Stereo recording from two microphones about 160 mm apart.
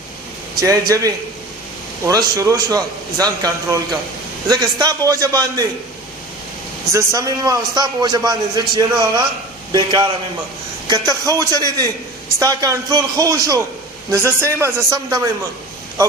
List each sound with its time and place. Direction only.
0.7 s a man's voice: 20° right (ahead or behind)
6.9 s a man's voice: 20° right (ahead or behind)